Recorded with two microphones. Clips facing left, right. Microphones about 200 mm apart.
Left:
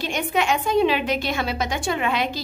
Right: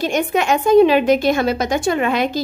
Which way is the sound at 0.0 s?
45° right (ahead or behind).